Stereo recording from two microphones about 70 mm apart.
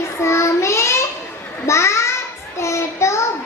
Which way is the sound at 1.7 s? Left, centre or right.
Left.